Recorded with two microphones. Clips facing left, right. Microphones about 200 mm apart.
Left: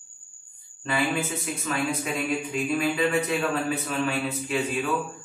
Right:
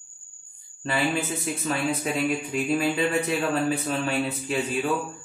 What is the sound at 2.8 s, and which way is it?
Speech, 30° right (ahead or behind).